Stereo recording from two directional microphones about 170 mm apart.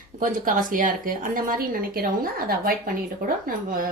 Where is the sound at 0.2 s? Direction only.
50° right (ahead or behind).